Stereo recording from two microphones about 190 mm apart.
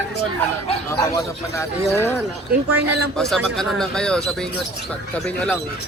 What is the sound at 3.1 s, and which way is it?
Speech, centre (ahead or behind).